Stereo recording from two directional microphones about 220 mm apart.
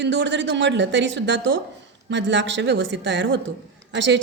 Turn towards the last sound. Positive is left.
turn(degrees=-55)  # may be behind; listen again after turning